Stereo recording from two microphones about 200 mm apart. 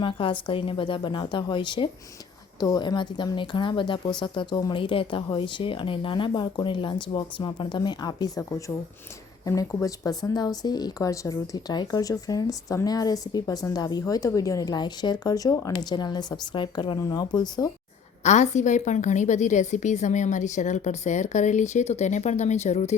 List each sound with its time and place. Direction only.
0.0 s speech: 25° left (ahead or behind)
18.2 s a woman's voice: 35° left (ahead or behind)